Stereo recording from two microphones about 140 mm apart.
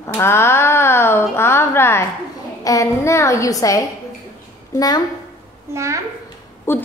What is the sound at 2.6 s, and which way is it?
A woman's voice, 25° left (ahead or behind).